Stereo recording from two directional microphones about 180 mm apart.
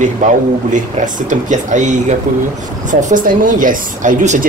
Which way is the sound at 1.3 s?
45° right (ahead or behind).